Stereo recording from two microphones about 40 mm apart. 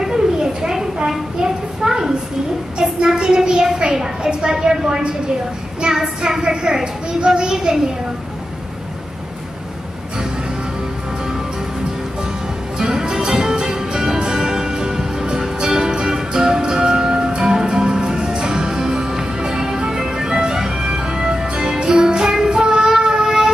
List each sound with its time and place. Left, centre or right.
0.0 s a sound: centre
4.6 s a woman's voice: centre
12.7 s music: centre